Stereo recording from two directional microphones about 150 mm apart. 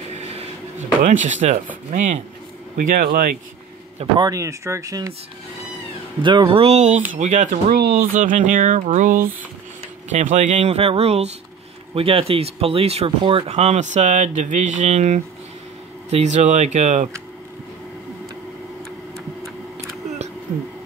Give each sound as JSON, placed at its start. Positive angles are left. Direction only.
{"t": 0.1, "sound": "a sound", "side_deg": -45}
{"t": 1.9, "sound": "speech", "side_deg": -55}
{"t": 2.8, "sound": "speech", "side_deg": -65}
{"t": 4.2, "sound": "speech", "side_deg": -20}
{"t": 6.2, "sound": "speech", "side_deg": -30}
{"t": 7.7, "sound": "speech", "side_deg": -70}